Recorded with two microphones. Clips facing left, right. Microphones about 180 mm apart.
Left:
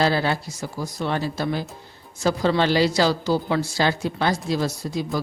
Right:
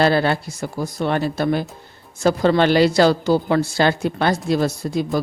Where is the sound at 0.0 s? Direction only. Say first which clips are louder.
Right 4 dB; 60° right (ahead or behind).